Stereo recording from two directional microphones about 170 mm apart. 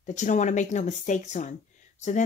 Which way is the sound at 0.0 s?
45° left (ahead or behind).